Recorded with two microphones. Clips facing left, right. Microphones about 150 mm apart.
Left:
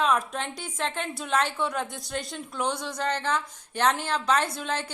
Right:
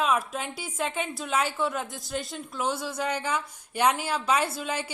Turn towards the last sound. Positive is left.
turn(degrees=-5)  # may be behind; listen again after turning